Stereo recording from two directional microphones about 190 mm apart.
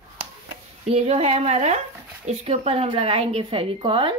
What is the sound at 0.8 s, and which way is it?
Speech, 35° right (ahead or behind).